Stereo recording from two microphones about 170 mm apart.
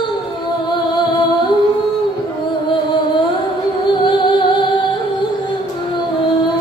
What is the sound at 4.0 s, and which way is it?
Music, 30° left (ahead or behind).